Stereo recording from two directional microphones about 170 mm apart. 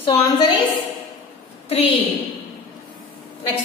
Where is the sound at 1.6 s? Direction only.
35° left (ahead or behind).